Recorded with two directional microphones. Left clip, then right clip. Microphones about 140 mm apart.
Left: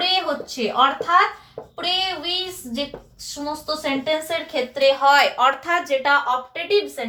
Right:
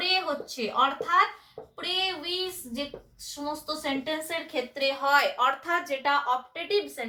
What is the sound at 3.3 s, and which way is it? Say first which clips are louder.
Speech: left 6 dB; 10° left (ahead or behind).